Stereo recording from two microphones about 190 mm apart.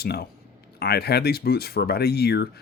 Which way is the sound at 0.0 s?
55° left (ahead or behind).